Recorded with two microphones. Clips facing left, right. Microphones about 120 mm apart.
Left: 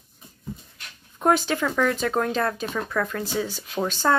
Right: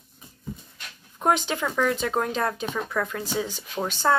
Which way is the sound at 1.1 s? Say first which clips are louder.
Left 2 dB; 15° right (ahead or behind).